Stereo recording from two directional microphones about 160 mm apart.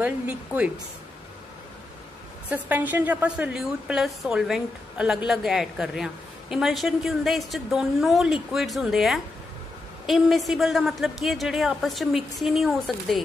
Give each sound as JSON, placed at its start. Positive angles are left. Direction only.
{"t": 0.0, "sound": "a woman's voice", "side_deg": -10}
{"t": 2.5, "sound": "a woman's voice", "side_deg": -10}